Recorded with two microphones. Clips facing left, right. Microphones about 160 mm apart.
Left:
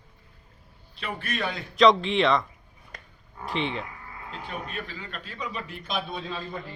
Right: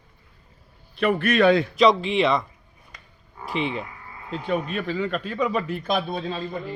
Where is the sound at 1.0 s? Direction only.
60° right (ahead or behind); by 1.6 s 75° right (ahead or behind).